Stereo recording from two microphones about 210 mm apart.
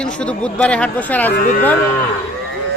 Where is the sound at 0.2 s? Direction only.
5° left (ahead or behind).